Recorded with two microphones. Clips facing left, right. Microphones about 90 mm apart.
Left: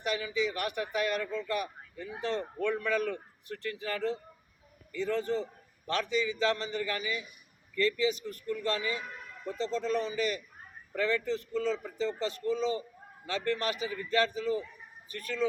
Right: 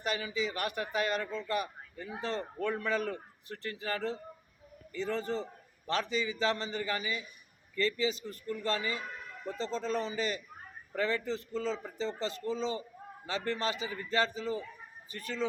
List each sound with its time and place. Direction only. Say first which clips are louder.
0.0 s a man's voice: left 2 dB; 35° right (ahead or behind)